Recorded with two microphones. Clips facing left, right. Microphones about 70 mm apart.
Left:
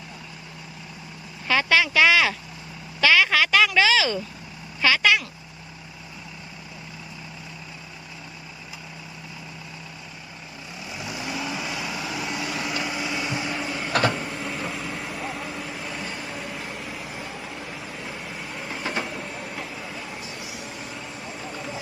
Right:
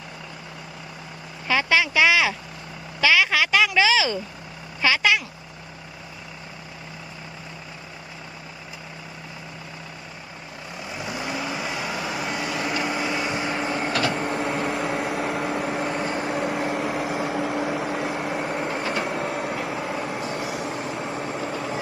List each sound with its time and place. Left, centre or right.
1.5 s speech: centre
3.0 s vehicle: centre
4.8 s speech: centre
10.8 s vehicle: right
14.1 s microwave oven: right